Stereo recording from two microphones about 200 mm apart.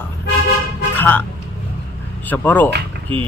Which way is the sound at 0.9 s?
10° left (ahead or behind).